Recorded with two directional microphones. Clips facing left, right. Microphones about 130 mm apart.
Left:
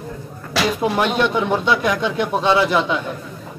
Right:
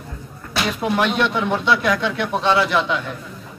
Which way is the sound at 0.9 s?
20° left (ahead or behind).